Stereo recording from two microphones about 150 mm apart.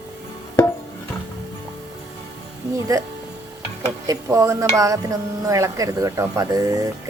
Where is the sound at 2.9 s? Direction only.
25° right (ahead or behind).